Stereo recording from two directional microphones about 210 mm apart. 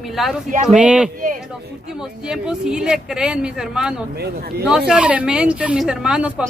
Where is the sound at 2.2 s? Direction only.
5° right (ahead or behind).